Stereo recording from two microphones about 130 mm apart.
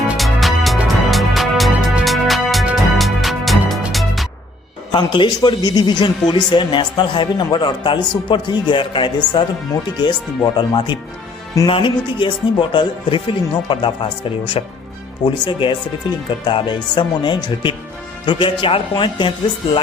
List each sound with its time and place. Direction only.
0.1 s music: centre (ahead or behind)
4.9 s a man's voice: 35° left (ahead or behind)